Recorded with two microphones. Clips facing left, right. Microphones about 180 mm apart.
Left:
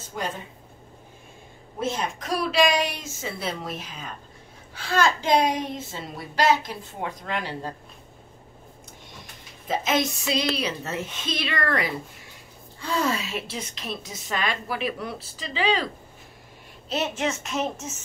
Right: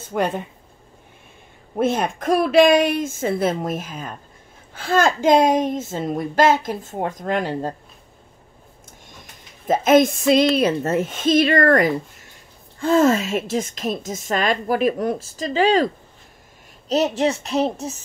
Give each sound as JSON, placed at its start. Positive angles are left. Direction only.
{"t": 0.1, "sound": "speech", "side_deg": -60}
{"t": 1.8, "sound": "a woman's voice", "side_deg": -55}
{"t": 9.7, "sound": "a woman's voice", "side_deg": -50}
{"t": 16.9, "sound": "speech", "side_deg": -35}